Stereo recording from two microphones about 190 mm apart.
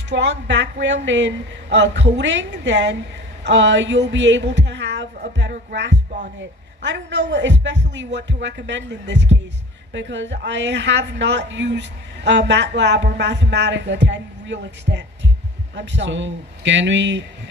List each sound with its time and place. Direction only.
0.1 s speech: 70° right (ahead or behind)